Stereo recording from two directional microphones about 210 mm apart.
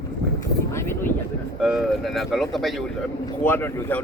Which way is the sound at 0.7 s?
10° left (ahead or behind).